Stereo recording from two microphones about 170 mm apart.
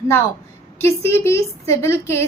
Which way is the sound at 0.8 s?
15° left (ahead or behind).